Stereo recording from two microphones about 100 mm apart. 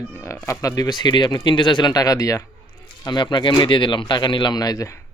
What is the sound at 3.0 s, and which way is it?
Speech, 45° left (ahead or behind).